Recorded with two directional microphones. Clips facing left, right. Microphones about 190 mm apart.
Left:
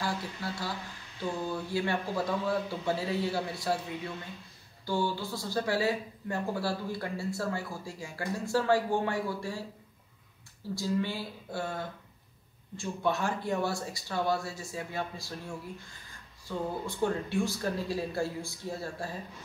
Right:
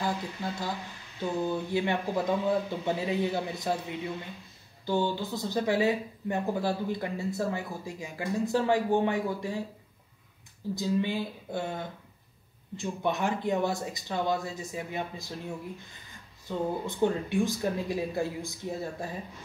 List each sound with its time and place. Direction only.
0.0 s speech: 20° right (ahead or behind)
4.8 s speech: 20° right (ahead or behind)
10.7 s speech: 20° right (ahead or behind)